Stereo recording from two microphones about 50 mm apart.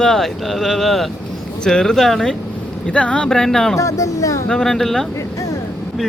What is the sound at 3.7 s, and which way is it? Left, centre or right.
Speech, left.